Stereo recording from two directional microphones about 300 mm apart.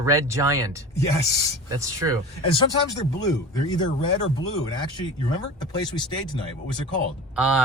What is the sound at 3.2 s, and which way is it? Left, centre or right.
Speech, centre.